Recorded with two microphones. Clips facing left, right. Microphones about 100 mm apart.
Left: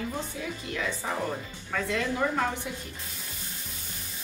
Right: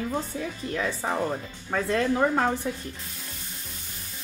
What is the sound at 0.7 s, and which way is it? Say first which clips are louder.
A woman's voice: right 4 dB; 40° right (ahead or behind).